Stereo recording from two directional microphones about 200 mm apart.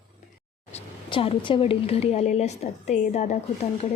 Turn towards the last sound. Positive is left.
turn(degrees=35)  # may be behind; listen again after turning